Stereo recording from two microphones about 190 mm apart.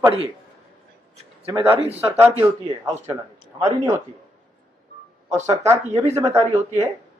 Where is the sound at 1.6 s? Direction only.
30° right (ahead or behind).